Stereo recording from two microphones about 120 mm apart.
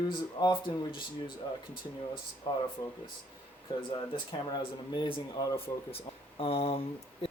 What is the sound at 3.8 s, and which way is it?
Speech, 40° left (ahead or behind).